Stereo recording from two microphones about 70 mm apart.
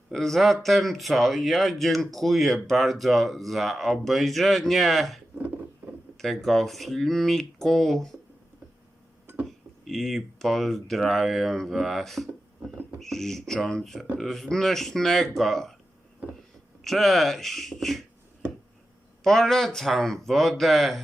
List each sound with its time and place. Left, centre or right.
0.1 s speech: centre
9.2 s a sound: right
9.5 s speech: centre
16.8 s speech: centre
19.2 s speech: centre